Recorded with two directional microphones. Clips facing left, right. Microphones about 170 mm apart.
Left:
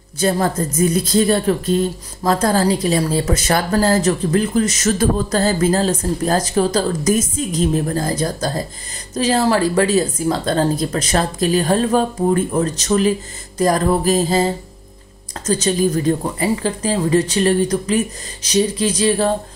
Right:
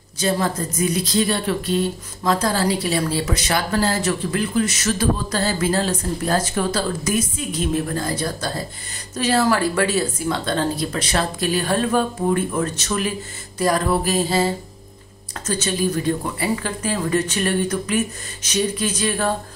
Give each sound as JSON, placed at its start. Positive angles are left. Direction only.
{"t": 0.2, "sound": "a woman's voice", "side_deg": 50}